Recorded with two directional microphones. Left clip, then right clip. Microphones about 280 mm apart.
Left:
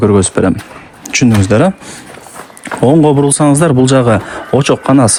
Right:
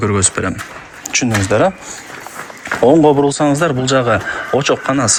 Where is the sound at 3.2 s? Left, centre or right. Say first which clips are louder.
Left 3 dB; left.